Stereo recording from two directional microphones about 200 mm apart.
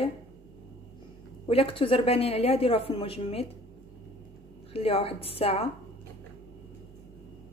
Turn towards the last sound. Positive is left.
turn(degrees=30)  # may be behind; listen again after turning